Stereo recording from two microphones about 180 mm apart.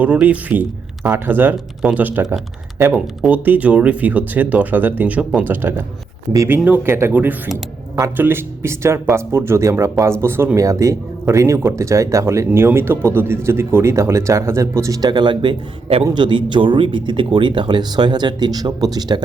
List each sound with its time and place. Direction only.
0.0 s speech: 10° right (ahead or behind)